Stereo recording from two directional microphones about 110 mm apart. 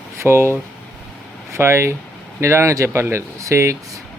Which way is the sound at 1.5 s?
25° right (ahead or behind).